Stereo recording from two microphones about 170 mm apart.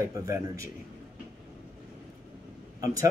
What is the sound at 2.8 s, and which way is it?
Speech, 20° right (ahead or behind).